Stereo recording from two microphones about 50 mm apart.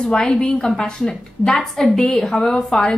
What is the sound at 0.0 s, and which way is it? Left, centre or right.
A woman's voice, centre.